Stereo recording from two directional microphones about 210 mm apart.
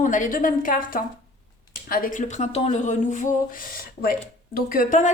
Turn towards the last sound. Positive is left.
turn(degrees=40)  # may be behind; listen again after turning